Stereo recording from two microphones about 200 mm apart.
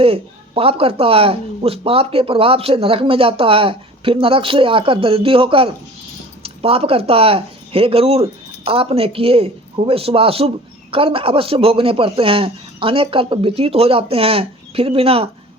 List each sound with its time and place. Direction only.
0.0 s speech: 30° right (ahead or behind)